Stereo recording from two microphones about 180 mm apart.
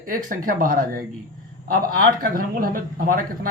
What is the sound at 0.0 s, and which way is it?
Speech, 50° right (ahead or behind).